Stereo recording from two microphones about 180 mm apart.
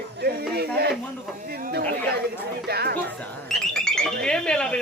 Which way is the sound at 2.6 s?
60° right (ahead or behind).